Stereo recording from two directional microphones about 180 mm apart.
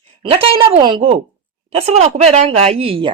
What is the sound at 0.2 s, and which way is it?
A woman's voice, 30° right (ahead or behind).